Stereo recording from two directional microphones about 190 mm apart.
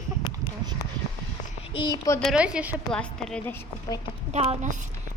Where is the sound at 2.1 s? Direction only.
5° left (ahead or behind).